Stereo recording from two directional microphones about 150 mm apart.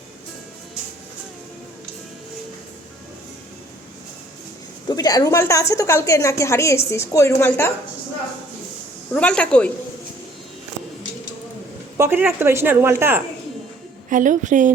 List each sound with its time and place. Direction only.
4.9 s a woman's voice: 25° left (ahead or behind)
9.1 s a woman's voice: 5° left (ahead or behind)
11.9 s speech: 15° right (ahead or behind)
14.1 s a woman's voice: 60° right (ahead or behind)